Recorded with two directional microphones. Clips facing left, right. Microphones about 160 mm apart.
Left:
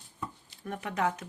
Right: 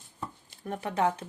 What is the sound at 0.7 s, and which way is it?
Speech, 30° right (ahead or behind).